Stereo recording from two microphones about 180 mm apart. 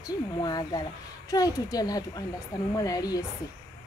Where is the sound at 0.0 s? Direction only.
20° left (ahead or behind).